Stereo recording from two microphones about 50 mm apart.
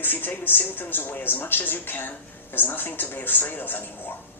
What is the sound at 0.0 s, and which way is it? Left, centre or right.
Speech, left.